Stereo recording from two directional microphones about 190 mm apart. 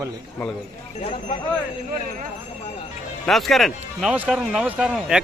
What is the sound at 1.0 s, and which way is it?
Speech, 35° left (ahead or behind).